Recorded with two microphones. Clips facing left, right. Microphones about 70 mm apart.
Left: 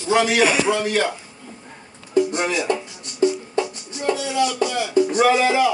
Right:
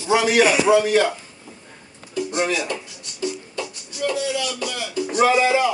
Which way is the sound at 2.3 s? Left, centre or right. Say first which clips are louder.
Left 1 dB; left.